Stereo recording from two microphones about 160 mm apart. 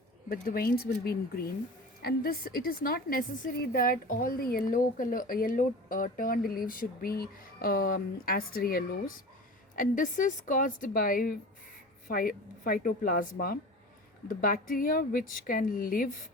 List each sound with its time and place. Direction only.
0.3 s speech: 70° left (ahead or behind)
2.0 s a woman's voice: 75° left (ahead or behind)
9.7 s a woman's voice: 55° left (ahead or behind)